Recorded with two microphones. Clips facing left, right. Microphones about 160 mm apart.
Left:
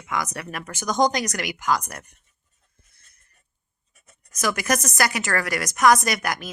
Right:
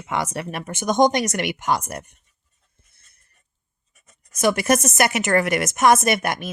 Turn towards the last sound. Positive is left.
turn(degrees=-25)  # may be behind; listen again after turning